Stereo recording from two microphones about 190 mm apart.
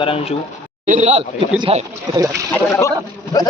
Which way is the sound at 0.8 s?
40° right (ahead or behind).